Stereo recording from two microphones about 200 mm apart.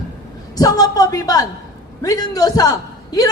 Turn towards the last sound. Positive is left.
turn(degrees=20)  # may be behind; listen again after turning